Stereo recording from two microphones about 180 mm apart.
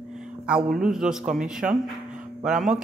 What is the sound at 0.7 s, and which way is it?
A man's voice, 5° right (ahead or behind).